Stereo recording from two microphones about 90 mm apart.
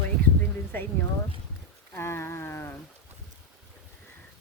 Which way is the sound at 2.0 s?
30° left (ahead or behind).